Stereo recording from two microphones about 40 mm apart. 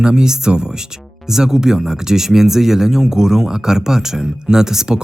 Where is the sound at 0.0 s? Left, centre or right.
Centre.